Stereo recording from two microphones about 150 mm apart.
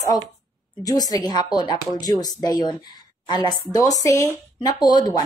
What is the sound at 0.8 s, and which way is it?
Speech, 25° left (ahead or behind).